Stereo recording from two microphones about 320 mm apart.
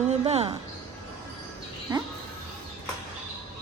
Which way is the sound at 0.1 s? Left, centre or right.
Centre.